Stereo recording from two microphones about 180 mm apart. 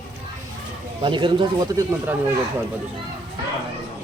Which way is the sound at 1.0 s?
25° right (ahead or behind).